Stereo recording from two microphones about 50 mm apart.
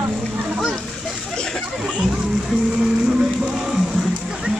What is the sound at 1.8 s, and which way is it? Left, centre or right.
Music, centre.